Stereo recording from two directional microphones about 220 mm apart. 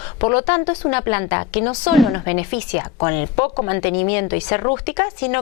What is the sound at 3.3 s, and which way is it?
Speech, 30° left (ahead or behind).